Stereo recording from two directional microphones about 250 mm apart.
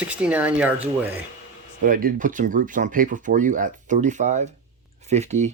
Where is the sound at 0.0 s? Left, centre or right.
Centre.